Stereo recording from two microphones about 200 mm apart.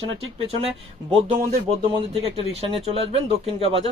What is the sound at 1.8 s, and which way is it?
Speech, 25° right (ahead or behind).